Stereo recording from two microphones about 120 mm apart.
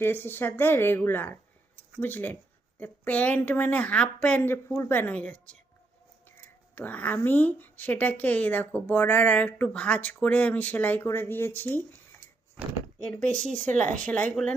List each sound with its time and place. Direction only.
0.0 s speech: 15° left (ahead or behind)
13.0 s speech: 10° left (ahead or behind)